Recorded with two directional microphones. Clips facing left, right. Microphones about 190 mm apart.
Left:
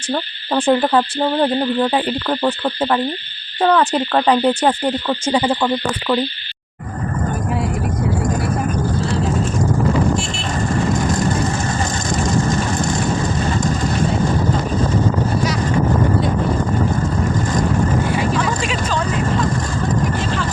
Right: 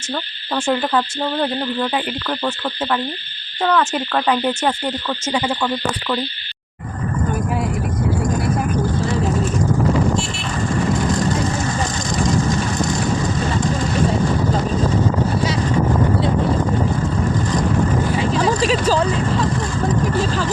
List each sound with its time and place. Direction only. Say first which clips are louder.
0.1 s cricket: left 4 dB; 35° left (ahead or behind)
18.3 s vehicle: right 3 dB; 35° right (ahead or behind)